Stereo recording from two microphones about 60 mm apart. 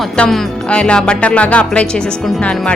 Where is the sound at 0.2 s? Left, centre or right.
Centre.